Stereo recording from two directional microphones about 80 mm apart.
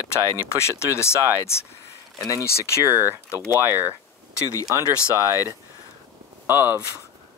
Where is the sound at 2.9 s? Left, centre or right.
Right.